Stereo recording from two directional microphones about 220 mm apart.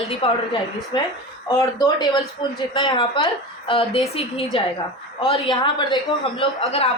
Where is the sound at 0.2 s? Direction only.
25° left (ahead or behind).